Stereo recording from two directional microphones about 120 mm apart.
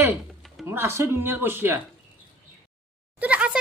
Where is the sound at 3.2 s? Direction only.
10° right (ahead or behind).